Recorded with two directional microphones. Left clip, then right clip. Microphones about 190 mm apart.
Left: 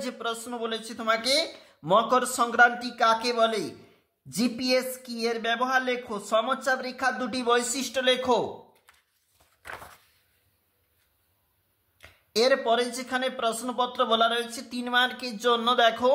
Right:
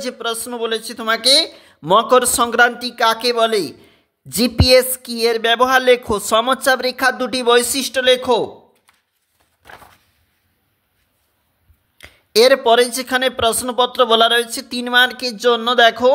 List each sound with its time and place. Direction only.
0.0 s speech: 35° right (ahead or behind)
12.0 s speech: 40° right (ahead or behind)